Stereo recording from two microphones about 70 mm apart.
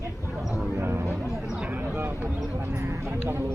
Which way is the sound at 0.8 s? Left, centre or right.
Right.